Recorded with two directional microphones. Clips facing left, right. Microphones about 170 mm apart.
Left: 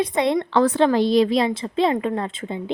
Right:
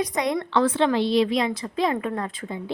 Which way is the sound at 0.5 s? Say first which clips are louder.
Left 3 dB; 40° left (ahead or behind).